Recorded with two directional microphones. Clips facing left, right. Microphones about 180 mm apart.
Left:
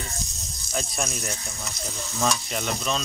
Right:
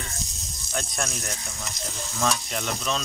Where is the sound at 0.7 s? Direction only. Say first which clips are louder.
Left 1 dB; centre (ahead or behind).